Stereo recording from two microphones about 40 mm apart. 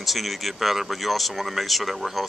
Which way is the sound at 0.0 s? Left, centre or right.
Centre.